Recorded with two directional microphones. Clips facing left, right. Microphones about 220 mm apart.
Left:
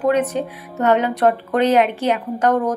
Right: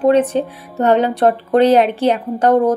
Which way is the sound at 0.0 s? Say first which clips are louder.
Right 5 dB; 30° right (ahead or behind).